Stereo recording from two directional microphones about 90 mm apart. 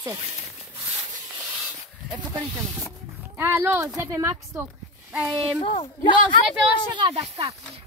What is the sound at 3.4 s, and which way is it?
Speech, 25° right (ahead or behind).